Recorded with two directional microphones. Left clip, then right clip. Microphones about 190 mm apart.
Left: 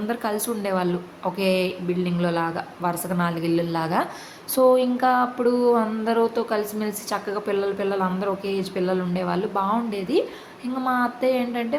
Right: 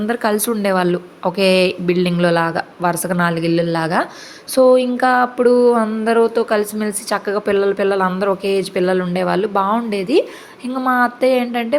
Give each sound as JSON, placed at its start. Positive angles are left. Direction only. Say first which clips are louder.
{"t": 0.1, "sound": "a woman's voice", "louder": "right 9 dB", "side_deg": -35}
{"t": 1.9, "sound": "speech", "louder": "right 9 dB", "side_deg": -55}
{"t": 2.1, "sound": "a woman's voice", "louder": "right 8 dB", "side_deg": -35}
{"t": 4.5, "sound": "a sound", "louder": "right 6 dB", "side_deg": -20}